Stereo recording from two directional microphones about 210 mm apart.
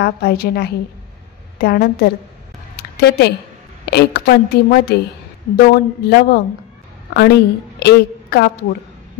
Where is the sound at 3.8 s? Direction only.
50° left (ahead or behind).